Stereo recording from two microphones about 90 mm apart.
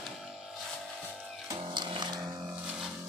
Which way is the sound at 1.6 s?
65° right (ahead or behind).